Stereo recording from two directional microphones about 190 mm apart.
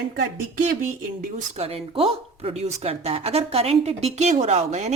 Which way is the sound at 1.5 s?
30° right (ahead or behind).